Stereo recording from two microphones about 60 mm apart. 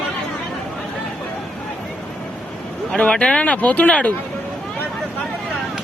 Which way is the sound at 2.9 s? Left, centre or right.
Centre.